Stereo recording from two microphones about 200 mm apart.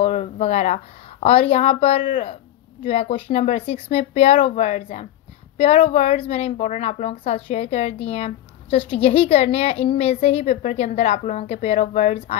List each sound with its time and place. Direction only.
0.0 s a woman's voice: 30° left (ahead or behind)